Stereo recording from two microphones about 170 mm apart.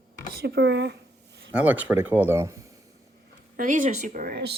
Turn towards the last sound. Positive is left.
turn(degrees=-65)  # may be behind; listen again after turning